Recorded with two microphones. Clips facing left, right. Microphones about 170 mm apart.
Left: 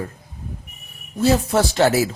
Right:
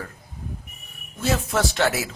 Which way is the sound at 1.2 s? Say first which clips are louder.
Left 6 dB; 35° left (ahead or behind).